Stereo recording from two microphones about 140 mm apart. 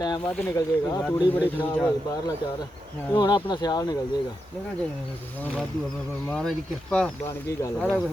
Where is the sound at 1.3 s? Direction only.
15° left (ahead or behind).